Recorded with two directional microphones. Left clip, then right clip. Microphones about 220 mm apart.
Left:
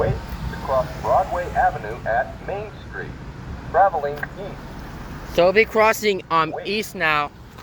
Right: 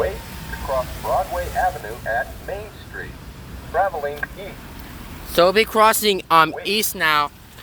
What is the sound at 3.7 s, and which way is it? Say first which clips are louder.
Speech: left 3 dB; 25° right (ahead or behind).